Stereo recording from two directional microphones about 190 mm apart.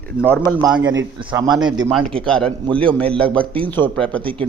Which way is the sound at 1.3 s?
15° right (ahead or behind).